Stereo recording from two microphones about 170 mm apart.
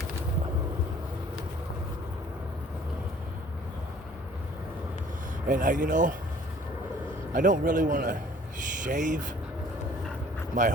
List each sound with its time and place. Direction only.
5.5 s a man's voice: 50° right (ahead or behind)
7.3 s a man's voice: 50° right (ahead or behind)
10.5 s speech: 50° right (ahead or behind)